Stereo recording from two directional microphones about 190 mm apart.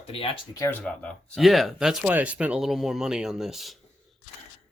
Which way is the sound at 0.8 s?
5° left (ahead or behind).